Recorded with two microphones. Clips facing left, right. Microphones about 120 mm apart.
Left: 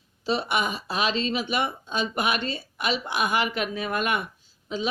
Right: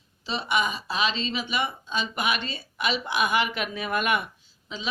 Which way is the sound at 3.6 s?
5° right (ahead or behind).